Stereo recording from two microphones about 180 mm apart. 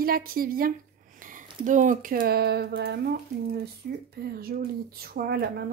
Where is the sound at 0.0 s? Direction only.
55° right (ahead or behind).